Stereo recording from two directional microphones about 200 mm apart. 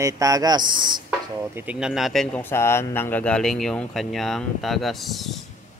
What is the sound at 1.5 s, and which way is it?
Speech, 10° right (ahead or behind).